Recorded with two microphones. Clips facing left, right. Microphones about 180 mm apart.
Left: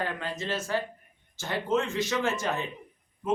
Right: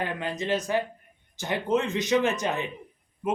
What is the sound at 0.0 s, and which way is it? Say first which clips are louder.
Speech: right 3 dB; 15° right (ahead or behind).